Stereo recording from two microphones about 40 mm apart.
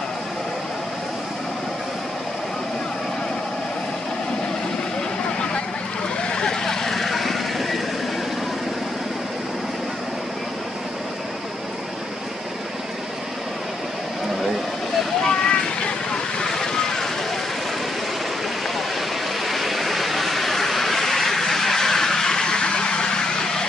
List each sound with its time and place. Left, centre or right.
5.2 s vehicle: left
6.6 s vehicle: centre
15.2 s vehicle: left
19.4 s vehicle: centre